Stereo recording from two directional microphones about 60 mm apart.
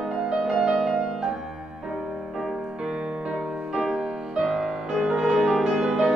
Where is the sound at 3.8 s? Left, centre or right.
Centre.